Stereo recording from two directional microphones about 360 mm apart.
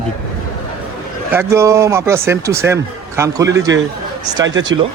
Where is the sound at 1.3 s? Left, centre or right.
Centre.